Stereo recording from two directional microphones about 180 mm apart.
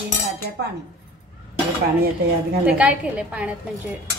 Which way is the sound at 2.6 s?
5° right (ahead or behind).